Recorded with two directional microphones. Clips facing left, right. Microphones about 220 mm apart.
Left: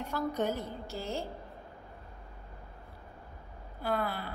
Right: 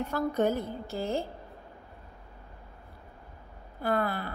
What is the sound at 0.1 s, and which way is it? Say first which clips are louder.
A woman's voice: right 4 dB; 50° right (ahead or behind).